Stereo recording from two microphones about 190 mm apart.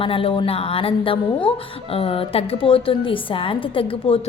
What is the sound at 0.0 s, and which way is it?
A woman's voice, 30° left (ahead or behind).